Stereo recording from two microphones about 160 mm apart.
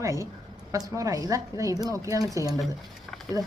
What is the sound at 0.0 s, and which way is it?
A woman's voice, 20° right (ahead or behind).